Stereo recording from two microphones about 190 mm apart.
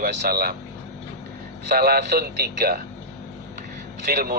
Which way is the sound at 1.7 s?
55° right (ahead or behind).